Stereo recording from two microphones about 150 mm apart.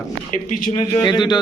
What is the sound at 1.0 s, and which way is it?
Speech, 30° left (ahead or behind).